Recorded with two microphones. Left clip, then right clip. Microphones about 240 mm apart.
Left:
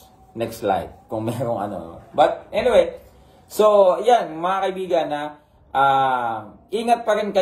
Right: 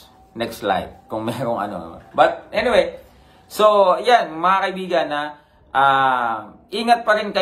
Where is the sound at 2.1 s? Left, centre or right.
Centre.